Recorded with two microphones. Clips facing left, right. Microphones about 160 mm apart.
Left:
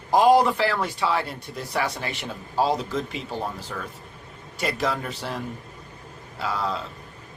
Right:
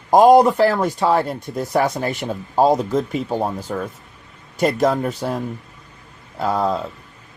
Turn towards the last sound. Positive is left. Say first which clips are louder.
# right 8 dB
turn(degrees=-45)  # may be behind; listen again after turning